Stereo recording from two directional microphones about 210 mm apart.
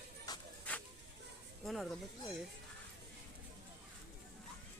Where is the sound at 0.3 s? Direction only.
20° left (ahead or behind).